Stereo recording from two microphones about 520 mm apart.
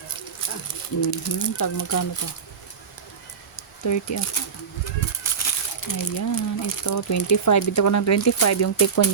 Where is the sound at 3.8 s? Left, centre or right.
Left.